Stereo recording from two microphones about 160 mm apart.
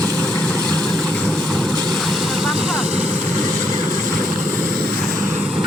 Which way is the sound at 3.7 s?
20° right (ahead or behind).